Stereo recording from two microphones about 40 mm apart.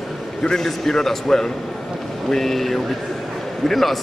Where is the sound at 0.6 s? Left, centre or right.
Centre.